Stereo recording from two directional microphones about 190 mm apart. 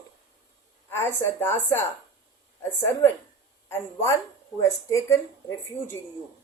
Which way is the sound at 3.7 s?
15° left (ahead or behind).